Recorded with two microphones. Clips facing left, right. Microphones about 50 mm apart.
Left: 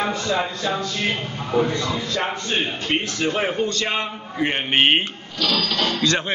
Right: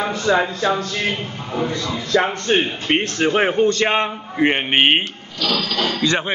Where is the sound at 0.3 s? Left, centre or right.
Right.